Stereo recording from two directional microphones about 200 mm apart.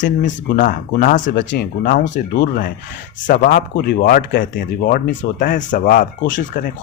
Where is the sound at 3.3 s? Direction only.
45° left (ahead or behind).